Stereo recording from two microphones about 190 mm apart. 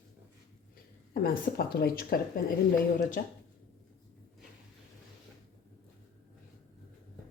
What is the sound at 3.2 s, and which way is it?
Speech, 55° left (ahead or behind).